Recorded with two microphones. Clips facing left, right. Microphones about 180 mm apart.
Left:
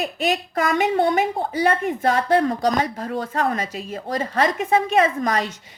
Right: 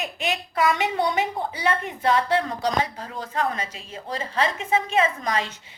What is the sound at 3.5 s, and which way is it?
Speech, 40° left (ahead or behind).